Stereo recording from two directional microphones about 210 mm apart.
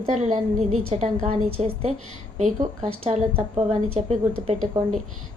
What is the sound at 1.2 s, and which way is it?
Music, 30° right (ahead or behind).